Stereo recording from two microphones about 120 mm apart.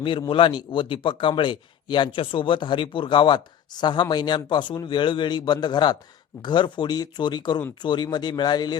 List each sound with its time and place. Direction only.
0.0 s a man's voice: 45° left (ahead or behind)